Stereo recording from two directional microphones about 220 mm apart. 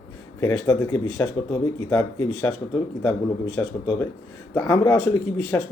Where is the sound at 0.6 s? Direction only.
15° left (ahead or behind).